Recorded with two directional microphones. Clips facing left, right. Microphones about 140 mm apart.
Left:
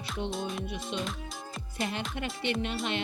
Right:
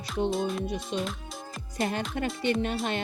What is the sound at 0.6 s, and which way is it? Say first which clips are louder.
Speech: right 4 dB; 40° right (ahead or behind).